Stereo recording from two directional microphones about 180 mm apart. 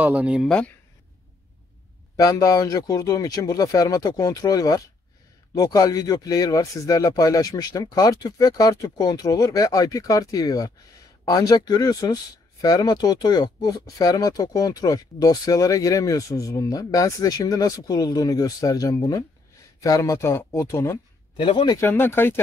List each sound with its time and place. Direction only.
0.0 s speech: 10° right (ahead or behind)
2.1 s speech: 20° left (ahead or behind)
21.4 s speech: 25° left (ahead or behind)
21.7 s speech: 15° left (ahead or behind)